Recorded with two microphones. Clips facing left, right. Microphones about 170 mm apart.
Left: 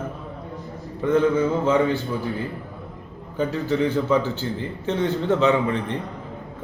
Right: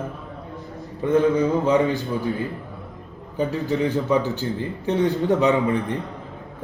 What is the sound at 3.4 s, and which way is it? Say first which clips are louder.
Speech: even; 15° right (ahead or behind).